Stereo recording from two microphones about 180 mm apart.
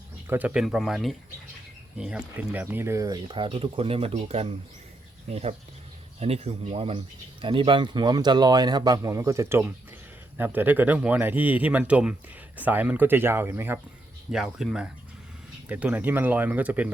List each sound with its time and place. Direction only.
0.3 s speech: 10° right (ahead or behind)
14.3 s speech: centre (ahead or behind)